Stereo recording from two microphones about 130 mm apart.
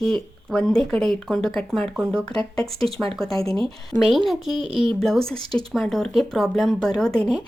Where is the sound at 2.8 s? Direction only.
45° right (ahead or behind).